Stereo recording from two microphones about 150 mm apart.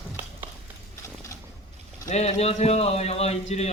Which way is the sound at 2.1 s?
45° left (ahead or behind).